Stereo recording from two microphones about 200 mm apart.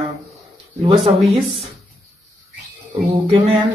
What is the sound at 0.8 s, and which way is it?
Speech, 30° right (ahead or behind).